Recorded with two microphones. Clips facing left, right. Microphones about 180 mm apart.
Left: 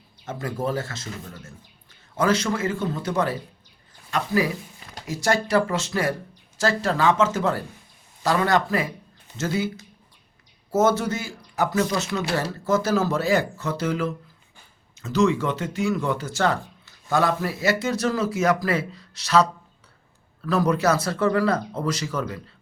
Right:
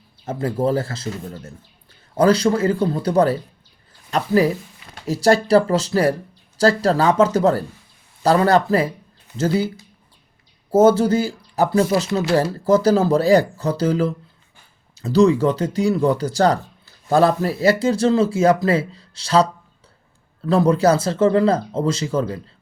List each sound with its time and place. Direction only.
0.3 s speech: 30° right (ahead or behind)